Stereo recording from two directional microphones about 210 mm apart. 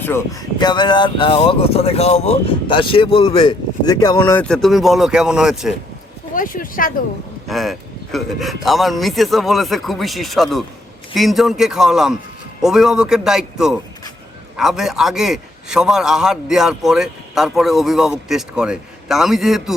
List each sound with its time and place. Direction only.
0.6 s speech: 20° left (ahead or behind); by 5.7 s centre (ahead or behind)
6.3 s speech: 40° left (ahead or behind)
7.4 s a man's voice: centre (ahead or behind)